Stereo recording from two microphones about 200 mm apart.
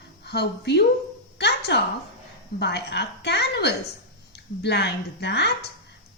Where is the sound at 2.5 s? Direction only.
55° left (ahead or behind).